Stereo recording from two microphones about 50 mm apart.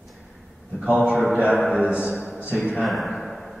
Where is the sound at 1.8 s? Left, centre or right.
Right.